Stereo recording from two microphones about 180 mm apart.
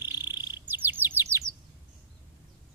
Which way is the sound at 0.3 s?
25° left (ahead or behind).